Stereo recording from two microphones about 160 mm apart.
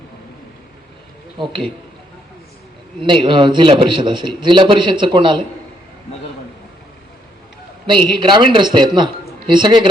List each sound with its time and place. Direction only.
1.4 s a man's voice: 35° right (ahead or behind)
3.0 s a man's voice: 30° right (ahead or behind)
7.9 s a man's voice: 30° right (ahead or behind)